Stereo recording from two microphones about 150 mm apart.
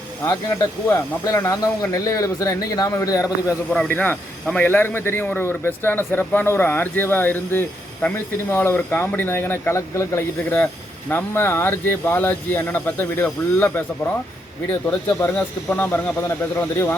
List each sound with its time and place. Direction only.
0.3 s speech: 20° left (ahead or behind)
3.7 s speech: 5° left (ahead or behind)
14.8 s speech: 15° left (ahead or behind)